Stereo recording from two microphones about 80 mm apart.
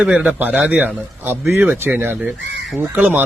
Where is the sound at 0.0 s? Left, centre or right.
Centre.